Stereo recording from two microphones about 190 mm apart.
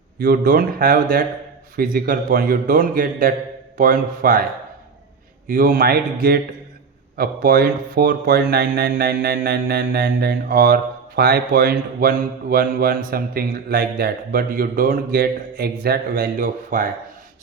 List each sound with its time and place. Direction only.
0.2 s speech: 50° right (ahead or behind)
5.5 s speech: 50° right (ahead or behind)
7.2 s speech: 50° right (ahead or behind)